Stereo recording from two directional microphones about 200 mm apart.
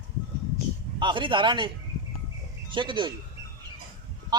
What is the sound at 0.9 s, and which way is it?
Speech, 25° right (ahead or behind).